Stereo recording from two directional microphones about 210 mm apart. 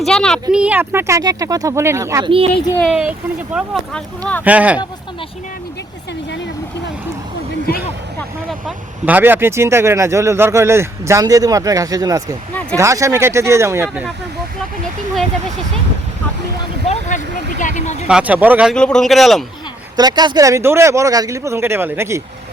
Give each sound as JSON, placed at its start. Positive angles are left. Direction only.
{"t": 0.0, "sound": "speech", "side_deg": 5}
{"t": 2.8, "sound": "speech", "side_deg": -5}
{"t": 8.4, "sound": "speech", "side_deg": -5}
{"t": 16.8, "sound": "vehicle", "side_deg": 35}
{"t": 18.1, "sound": "speech", "side_deg": -5}
{"t": 18.7, "sound": "speech", "side_deg": 5}
{"t": 20.0, "sound": "speech", "side_deg": -20}